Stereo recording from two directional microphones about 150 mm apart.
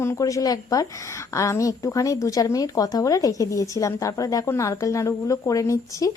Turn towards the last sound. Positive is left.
turn(degrees=20)  # may be behind; listen again after turning